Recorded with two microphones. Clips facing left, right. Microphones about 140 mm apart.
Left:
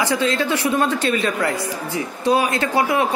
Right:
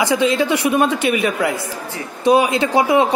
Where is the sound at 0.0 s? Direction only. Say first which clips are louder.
Right 4 dB; 15° right (ahead or behind).